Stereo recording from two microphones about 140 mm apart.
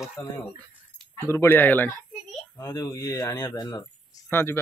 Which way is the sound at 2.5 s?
25° left (ahead or behind).